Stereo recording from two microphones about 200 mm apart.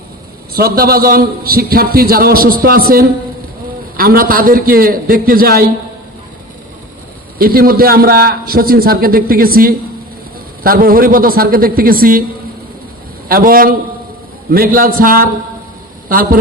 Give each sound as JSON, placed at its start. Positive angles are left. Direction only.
{"t": 0.5, "sound": "a man's voice", "side_deg": -50}
{"t": 7.3, "sound": "a man's voice", "side_deg": -45}
{"t": 13.2, "sound": "a man's voice", "side_deg": -45}